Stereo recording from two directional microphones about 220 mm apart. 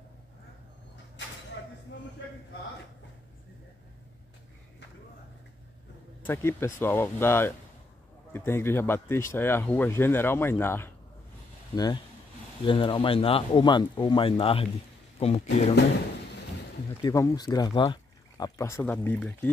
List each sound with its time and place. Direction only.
6.2 s speech: 10° left (ahead or behind); by 15.4 s 25° left (ahead or behind)
17.0 s speech: 15° left (ahead or behind)